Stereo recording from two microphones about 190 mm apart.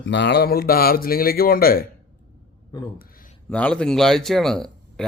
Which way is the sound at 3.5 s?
5° left (ahead or behind).